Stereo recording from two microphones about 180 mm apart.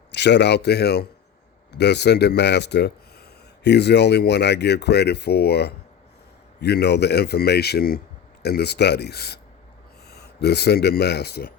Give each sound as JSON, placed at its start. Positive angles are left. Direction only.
{"t": 0.1, "sound": "speech", "side_deg": 75}